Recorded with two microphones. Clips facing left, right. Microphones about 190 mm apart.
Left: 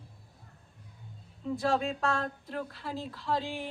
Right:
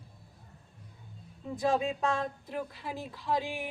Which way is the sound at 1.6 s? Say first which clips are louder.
Right 2 dB; 15° right (ahead or behind).